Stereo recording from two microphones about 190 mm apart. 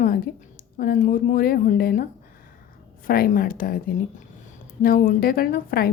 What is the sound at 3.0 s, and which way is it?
A woman's voice, 50° left (ahead or behind).